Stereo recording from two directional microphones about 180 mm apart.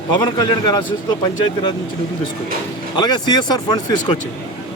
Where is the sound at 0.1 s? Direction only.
25° left (ahead or behind).